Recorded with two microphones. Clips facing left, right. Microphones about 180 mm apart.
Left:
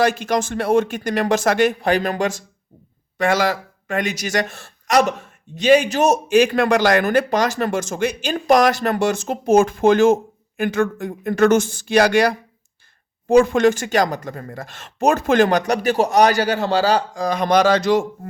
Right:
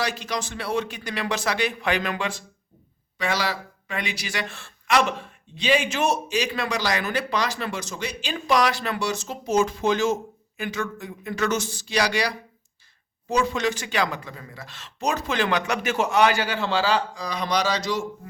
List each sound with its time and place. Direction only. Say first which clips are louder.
0.0 s speech: left 10 dB; 50° left (ahead or behind)